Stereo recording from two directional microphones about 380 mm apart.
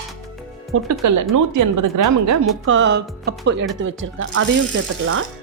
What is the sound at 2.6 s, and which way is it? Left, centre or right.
Speech, right.